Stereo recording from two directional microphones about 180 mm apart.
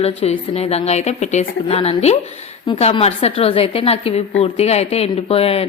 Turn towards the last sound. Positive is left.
turn(degrees=35)  # may be behind; listen again after turning